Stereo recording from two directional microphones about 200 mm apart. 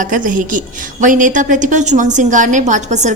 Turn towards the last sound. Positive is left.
turn(degrees=-35)  # may be behind; listen again after turning